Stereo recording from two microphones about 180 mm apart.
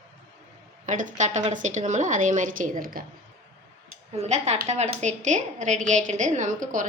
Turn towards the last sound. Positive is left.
turn(degrees=-45)  # may be behind; listen again after turning